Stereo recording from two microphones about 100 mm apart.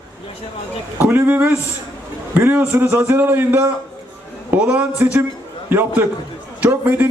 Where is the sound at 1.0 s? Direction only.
20° right (ahead or behind).